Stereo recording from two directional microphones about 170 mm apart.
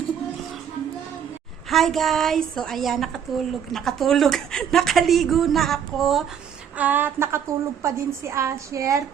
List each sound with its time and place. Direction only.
1.7 s a woman's voice: centre (ahead or behind)
6.7 s a woman's voice: 10° right (ahead or behind)